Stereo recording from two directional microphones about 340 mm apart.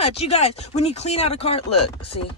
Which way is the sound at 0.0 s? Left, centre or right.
Centre.